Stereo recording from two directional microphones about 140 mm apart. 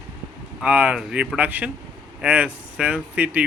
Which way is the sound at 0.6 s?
10° right (ahead or behind).